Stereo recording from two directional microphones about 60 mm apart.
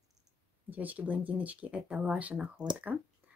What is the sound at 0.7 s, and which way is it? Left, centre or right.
Speech, right.